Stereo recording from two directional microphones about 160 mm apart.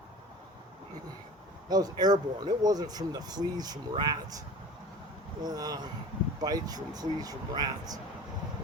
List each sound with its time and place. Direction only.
1.7 s speech: 25° right (ahead or behind)